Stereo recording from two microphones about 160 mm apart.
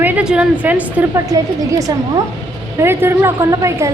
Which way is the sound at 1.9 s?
25° right (ahead or behind).